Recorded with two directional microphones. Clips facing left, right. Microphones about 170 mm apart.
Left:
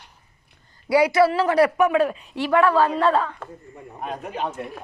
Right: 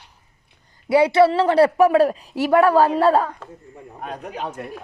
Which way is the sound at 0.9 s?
25° right (ahead or behind).